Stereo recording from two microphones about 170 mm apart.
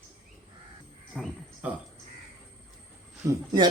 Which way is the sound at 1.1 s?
5° right (ahead or behind).